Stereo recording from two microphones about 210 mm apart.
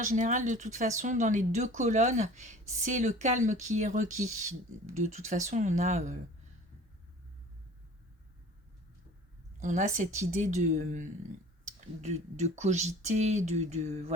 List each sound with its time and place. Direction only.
0.0 s speech: 35° right (ahead or behind)
9.6 s speech: 35° right (ahead or behind)